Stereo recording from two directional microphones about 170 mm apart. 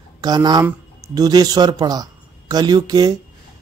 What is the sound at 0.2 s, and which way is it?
Speech, 25° right (ahead or behind).